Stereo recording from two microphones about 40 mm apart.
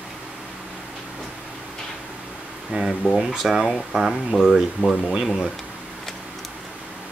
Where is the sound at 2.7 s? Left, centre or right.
Right.